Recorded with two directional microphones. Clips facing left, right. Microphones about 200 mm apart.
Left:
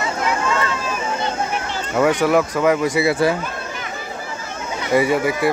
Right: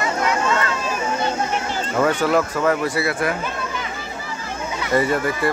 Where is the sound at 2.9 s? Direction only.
30° left (ahead or behind).